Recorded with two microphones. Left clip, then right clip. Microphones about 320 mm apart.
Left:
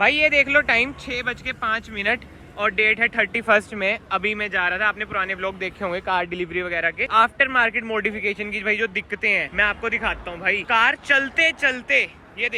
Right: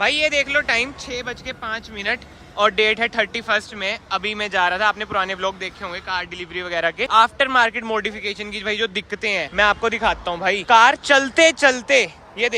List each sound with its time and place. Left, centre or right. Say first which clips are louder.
0.0 s speech: left 1 dB; centre
12.0 s a man's voice: right 4 dB; right